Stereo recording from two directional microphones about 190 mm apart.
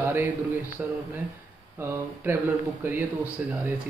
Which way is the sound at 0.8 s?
5° right (ahead or behind).